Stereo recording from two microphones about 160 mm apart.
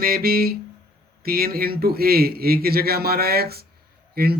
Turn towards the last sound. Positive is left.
turn(degrees=-75)  # may be behind; listen again after turning